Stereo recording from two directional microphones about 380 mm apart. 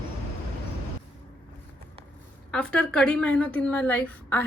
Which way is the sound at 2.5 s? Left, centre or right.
Centre.